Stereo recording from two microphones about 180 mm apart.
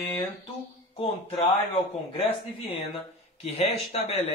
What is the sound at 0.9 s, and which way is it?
Speech, 30° left (ahead or behind).